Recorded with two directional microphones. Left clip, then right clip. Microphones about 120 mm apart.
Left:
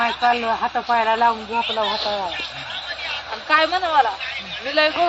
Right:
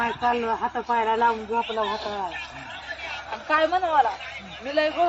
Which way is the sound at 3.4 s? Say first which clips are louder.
Left 4 dB; centre (ahead or behind).